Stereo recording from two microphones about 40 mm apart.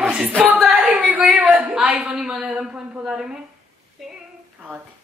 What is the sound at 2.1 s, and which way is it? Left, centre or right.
A man's voice, centre.